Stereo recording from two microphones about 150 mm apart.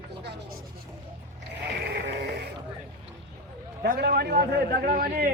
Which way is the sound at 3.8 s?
90° right.